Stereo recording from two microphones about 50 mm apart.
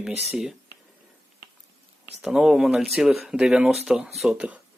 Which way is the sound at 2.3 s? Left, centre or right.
Centre.